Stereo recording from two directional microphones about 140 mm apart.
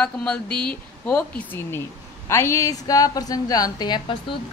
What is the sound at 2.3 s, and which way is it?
A woman's voice, 20° left (ahead or behind).